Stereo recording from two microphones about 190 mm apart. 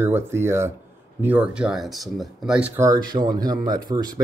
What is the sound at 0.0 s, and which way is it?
Speech, 10° right (ahead or behind).